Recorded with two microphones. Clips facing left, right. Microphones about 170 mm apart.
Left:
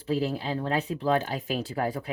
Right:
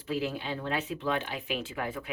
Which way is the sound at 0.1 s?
35° left (ahead or behind).